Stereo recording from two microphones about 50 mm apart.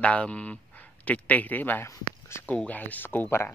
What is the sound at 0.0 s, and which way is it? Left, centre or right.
Speech, left.